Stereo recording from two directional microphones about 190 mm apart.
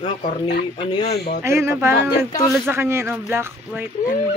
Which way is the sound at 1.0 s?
55° left (ahead or behind).